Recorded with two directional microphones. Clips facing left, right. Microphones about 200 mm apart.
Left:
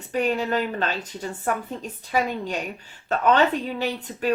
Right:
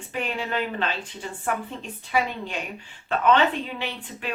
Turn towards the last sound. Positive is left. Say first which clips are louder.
# left 8 dB
turn(degrees=40)  # may be behind; listen again after turning